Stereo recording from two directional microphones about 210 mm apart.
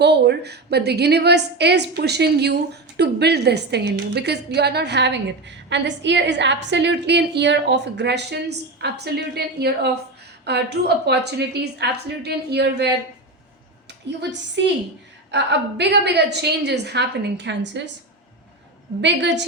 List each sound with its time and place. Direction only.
0.0 s a woman's voice: 55° right (ahead or behind)
19.0 s a woman's voice: 55° right (ahead or behind)